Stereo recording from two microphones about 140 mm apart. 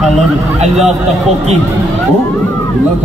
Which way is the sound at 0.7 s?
Centre (ahead or behind).